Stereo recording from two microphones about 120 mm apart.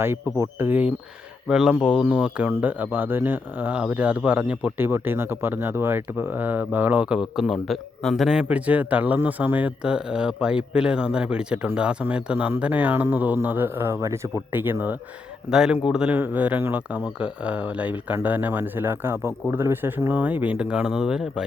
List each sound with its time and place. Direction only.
0.0 s speech: 20° right (ahead or behind)
15.4 s speech: 5° right (ahead or behind)